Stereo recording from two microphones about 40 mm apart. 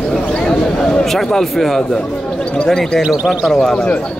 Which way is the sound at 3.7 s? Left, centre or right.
Left.